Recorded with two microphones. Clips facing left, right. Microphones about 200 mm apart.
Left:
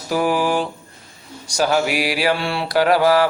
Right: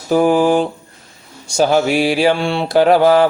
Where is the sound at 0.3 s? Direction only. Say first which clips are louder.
Right 6 dB; 45° right (ahead or behind).